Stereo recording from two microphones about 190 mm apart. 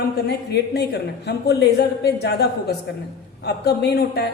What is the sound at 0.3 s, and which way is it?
Speech, 60° left (ahead or behind).